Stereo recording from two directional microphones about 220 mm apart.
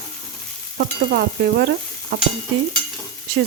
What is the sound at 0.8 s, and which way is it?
Stir, 50° right (ahead or behind).